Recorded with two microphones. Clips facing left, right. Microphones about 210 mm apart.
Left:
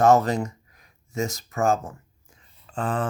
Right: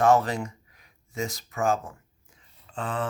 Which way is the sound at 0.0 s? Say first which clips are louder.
Left 3 dB; 40° left (ahead or behind).